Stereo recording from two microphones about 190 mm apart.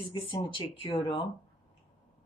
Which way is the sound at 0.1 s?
25° left (ahead or behind).